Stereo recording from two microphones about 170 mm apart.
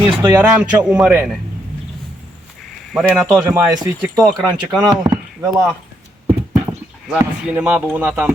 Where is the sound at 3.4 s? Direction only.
20° right (ahead or behind).